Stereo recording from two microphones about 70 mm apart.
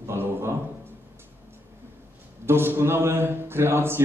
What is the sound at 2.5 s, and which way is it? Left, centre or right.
Speech, right.